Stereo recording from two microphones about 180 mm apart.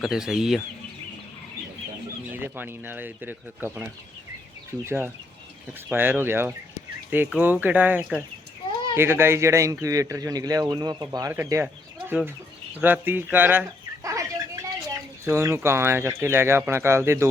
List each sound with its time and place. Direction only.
0.0 s speech: 5° right (ahead or behind)
2.3 s speech: 10° right (ahead or behind)
4.9 s speech: 10° right (ahead or behind)
12.8 s bird: 10° right (ahead or behind)
15.2 s speech: 15° right (ahead or behind)